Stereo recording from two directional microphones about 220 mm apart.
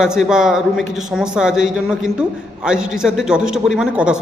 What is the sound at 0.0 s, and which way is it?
A man's voice, 5° right (ahead or behind).